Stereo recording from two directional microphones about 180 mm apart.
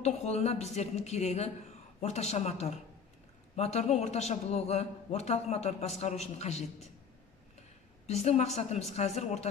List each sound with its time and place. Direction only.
0.0 s a man's voice: 35° left (ahead or behind)
8.1 s a man's voice: 35° left (ahead or behind)